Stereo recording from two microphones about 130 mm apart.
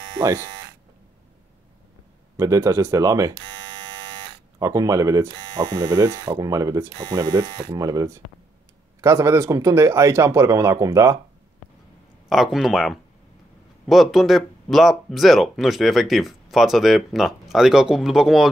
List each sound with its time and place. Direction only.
2.3 s speech: 25° right (ahead or behind)
4.6 s speech: 25° right (ahead or behind)
12.3 s speech: centre (ahead or behind)